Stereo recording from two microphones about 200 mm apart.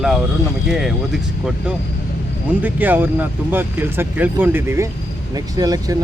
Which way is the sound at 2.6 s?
10° right (ahead or behind).